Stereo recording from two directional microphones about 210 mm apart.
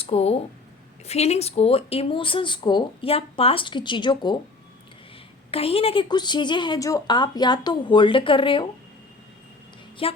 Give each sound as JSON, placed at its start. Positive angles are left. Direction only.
{"t": 0.0, "sound": "speech", "side_deg": 30}
{"t": 5.5, "sound": "speech", "side_deg": 25}
{"t": 10.0, "sound": "speech", "side_deg": 25}